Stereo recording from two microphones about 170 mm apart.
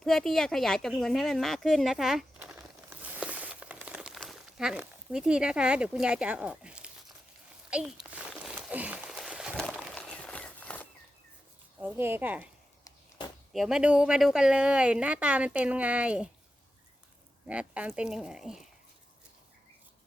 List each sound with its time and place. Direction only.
0.0 s a sound: 5° left (ahead or behind)
9.9 s walk: 5° left (ahead or behind)
11.8 s speech: 10° right (ahead or behind)
12.8 s a sound: 25° left (ahead or behind)
13.5 s speech: centre (ahead or behind)
17.4 s speech: 5° right (ahead or behind)